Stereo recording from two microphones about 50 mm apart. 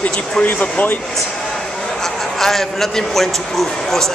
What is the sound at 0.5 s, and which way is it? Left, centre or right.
Speech, left.